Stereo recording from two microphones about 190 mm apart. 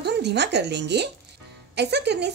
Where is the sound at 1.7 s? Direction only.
65° right (ahead or behind).